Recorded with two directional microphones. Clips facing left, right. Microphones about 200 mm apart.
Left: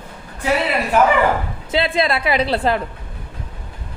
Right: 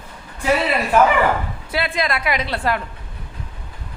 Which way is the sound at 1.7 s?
25° left (ahead or behind).